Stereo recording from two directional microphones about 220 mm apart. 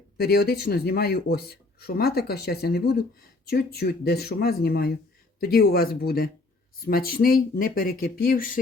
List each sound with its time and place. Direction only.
0.2 s speech: 45° left (ahead or behind)